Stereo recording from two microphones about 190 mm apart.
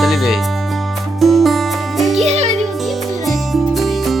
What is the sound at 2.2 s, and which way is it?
Music, 35° right (ahead or behind).